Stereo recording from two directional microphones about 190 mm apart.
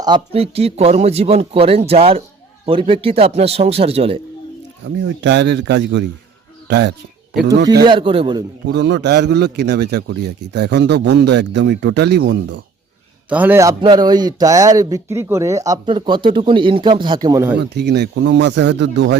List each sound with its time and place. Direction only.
0.0 s speech: 25° right (ahead or behind)
5.0 s a man's voice: 70° right (ahead or behind)
7.9 s a man's voice: 25° right (ahead or behind)
8.6 s a man's voice: 65° right (ahead or behind)
13.3 s a man's voice: 10° right (ahead or behind)
17.6 s a man's voice: 60° right (ahead or behind)